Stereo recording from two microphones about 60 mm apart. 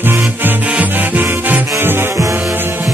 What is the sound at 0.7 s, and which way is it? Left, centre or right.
Music, right.